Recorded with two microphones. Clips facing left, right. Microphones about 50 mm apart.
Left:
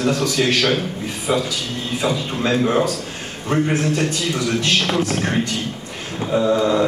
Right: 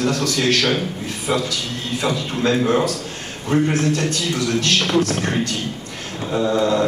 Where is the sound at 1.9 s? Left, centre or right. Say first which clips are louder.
Even; centre.